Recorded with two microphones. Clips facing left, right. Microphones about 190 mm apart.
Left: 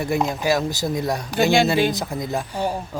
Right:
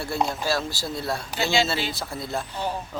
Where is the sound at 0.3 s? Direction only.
15° left (ahead or behind).